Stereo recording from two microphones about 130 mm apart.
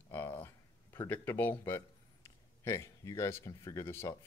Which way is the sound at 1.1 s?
15° left (ahead or behind).